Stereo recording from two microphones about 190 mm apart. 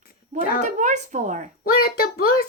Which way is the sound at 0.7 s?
40° right (ahead or behind).